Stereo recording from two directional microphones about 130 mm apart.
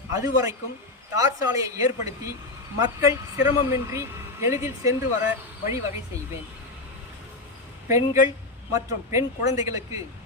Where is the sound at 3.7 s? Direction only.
20° right (ahead or behind).